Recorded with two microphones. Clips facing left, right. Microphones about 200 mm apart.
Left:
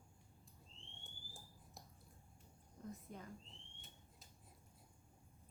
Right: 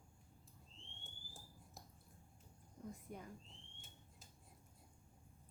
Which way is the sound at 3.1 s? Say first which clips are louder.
Right 2 dB; 15° right (ahead or behind).